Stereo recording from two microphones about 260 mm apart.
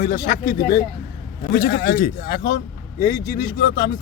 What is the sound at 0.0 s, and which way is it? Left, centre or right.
Speech, left.